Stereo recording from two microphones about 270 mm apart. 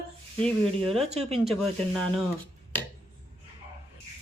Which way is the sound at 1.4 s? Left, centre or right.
Centre.